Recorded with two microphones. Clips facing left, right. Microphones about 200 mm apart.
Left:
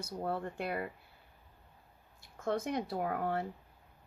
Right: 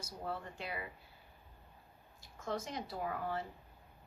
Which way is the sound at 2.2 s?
60° left (ahead or behind).